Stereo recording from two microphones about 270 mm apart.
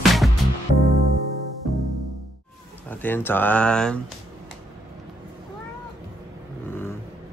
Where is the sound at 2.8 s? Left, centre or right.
Centre.